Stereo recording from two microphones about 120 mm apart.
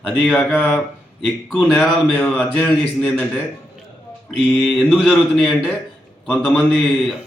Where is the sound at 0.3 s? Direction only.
15° left (ahead or behind).